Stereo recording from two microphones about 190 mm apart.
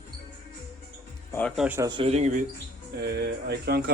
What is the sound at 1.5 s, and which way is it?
Speech, 5° right (ahead or behind).